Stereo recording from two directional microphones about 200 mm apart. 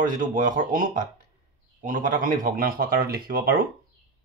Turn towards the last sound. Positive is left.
turn(degrees=-45)  # may be behind; listen again after turning